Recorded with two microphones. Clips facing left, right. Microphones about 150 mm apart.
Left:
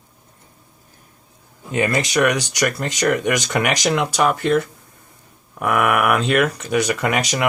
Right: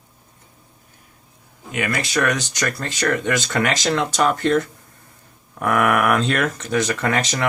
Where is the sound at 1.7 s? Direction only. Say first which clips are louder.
Left 4 dB; 30° left (ahead or behind).